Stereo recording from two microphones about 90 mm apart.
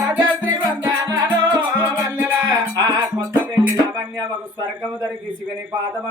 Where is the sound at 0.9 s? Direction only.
50° right (ahead or behind).